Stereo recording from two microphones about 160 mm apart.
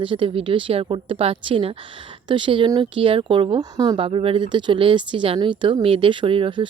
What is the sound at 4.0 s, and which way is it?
A woman's voice, 35° right (ahead or behind).